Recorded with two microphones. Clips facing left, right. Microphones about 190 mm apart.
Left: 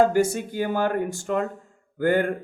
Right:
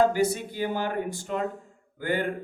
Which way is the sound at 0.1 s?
45° left (ahead or behind).